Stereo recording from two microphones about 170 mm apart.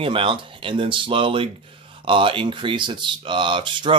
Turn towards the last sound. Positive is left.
turn(degrees=-30)  # may be behind; listen again after turning